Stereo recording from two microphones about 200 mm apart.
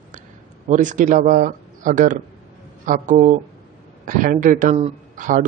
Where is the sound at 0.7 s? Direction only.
40° right (ahead or behind).